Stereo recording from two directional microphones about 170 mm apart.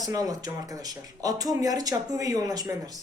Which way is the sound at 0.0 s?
20° right (ahead or behind).